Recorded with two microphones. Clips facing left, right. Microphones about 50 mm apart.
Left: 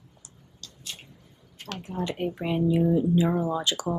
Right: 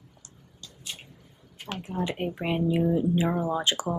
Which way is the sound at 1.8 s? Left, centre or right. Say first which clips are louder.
Left 1 dB; right.